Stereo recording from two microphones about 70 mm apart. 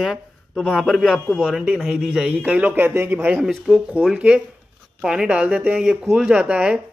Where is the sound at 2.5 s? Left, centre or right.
Right.